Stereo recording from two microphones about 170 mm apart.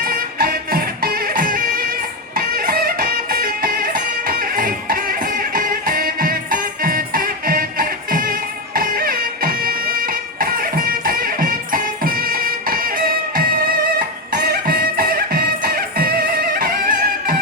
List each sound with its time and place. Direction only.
0.0 s music: 60° right (ahead or behind)
14.3 s music: 65° right (ahead or behind)